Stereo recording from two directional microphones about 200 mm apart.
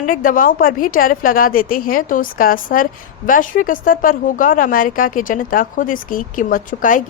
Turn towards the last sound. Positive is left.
turn(degrees=40)  # may be behind; listen again after turning